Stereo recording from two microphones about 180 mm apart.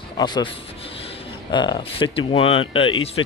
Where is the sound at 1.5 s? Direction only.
25° left (ahead or behind).